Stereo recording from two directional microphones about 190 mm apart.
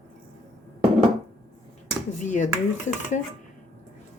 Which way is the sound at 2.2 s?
40° left (ahead or behind).